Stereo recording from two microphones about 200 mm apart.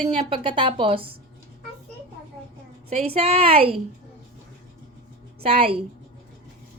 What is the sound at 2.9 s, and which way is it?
Speech, 30° right (ahead or behind).